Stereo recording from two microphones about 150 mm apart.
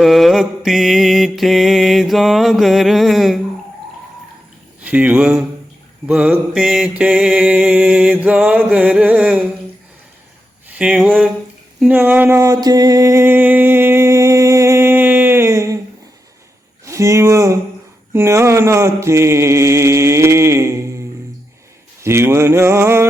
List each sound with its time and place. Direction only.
0.0 s mantra: centre (ahead or behind)
4.9 s mantra: 10° right (ahead or behind)
10.7 s speech: 10° right (ahead or behind)
11.8 s a sound: 10° right (ahead or behind)
16.8 s speech: 20° right (ahead or behind)
18.1 s mantra: 15° right (ahead or behind)
22.0 s mantra: 15° right (ahead or behind)